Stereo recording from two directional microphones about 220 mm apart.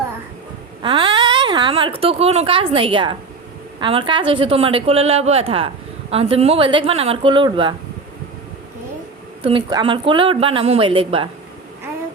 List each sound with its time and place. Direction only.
0.8 s a woman's voice: 25° right (ahead or behind)
9.4 s a woman's voice: 25° right (ahead or behind)